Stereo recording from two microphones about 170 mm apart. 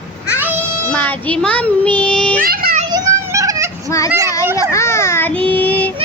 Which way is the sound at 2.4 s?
60° right (ahead or behind).